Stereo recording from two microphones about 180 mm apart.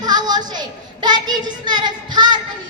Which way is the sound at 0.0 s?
20° right (ahead or behind).